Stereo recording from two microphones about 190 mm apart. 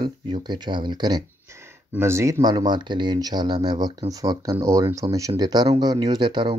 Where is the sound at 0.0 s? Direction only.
25° right (ahead or behind).